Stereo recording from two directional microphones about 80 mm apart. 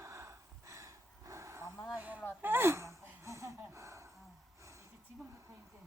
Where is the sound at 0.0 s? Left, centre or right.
Right.